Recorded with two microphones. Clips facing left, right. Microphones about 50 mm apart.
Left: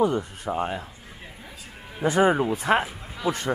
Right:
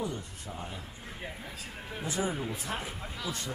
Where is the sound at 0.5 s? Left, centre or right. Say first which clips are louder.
Left 14 dB; left.